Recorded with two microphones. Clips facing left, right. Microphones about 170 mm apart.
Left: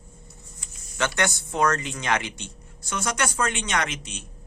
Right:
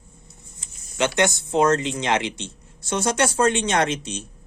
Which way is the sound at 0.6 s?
20° right (ahead or behind).